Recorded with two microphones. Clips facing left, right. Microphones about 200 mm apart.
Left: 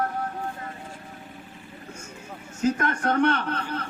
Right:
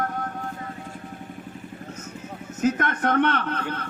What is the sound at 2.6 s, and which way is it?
A man's voice, 30° left (ahead or behind).